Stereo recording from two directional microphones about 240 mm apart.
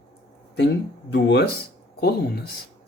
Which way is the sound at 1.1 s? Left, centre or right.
Left.